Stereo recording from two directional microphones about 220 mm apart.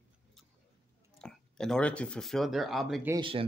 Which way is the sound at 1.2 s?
5° left (ahead or behind).